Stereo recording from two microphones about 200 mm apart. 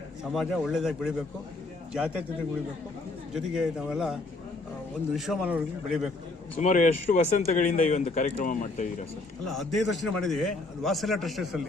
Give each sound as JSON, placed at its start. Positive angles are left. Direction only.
{"t": 0.3, "sound": "a man's voice", "side_deg": 0}
{"t": 3.3, "sound": "a man's voice", "side_deg": 0}
{"t": 6.6, "sound": "speech", "side_deg": 40}
{"t": 9.5, "sound": "a man's voice", "side_deg": 0}